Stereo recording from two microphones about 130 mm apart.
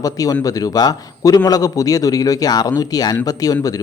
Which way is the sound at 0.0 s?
25° left (ahead or behind).